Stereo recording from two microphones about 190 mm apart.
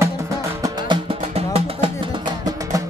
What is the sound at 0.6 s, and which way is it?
Music, 25° right (ahead or behind).